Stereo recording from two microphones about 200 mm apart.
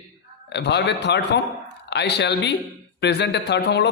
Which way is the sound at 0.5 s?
60° left (ahead or behind).